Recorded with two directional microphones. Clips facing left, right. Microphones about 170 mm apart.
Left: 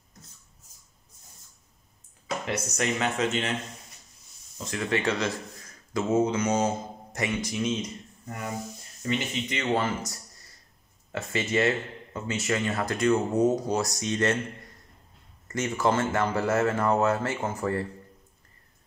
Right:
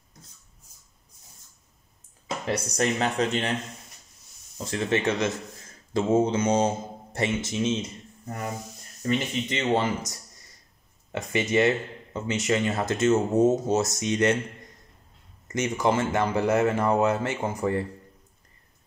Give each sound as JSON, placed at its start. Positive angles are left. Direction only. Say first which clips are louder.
{"t": 2.2, "sound": "speech", "louder": "right 2 dB", "side_deg": -35}
{"t": 4.6, "sound": "speech", "louder": "right 2 dB", "side_deg": -25}
{"t": 9.8, "sound": "speech", "louder": "right 2 dB", "side_deg": -20}
{"t": 15.4, "sound": "speech", "louder": "right 1 dB", "side_deg": -20}